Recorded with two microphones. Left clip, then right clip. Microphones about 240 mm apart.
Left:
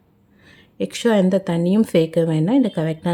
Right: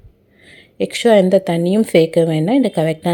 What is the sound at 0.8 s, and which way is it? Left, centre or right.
A woman's voice, centre.